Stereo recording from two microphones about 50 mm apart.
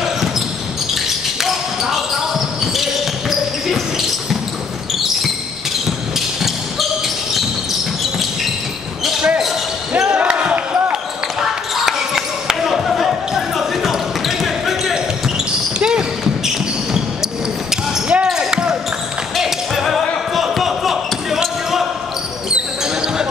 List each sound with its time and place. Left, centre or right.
0.9 s basketball bounce: centre
4.9 s basketball bounce: centre
5.9 s a sound: centre
9.9 s basketball bounce: right
11.7 s basketball bounce: centre
15.8 s basketball bounce: centre
19.3 s basketball bounce: centre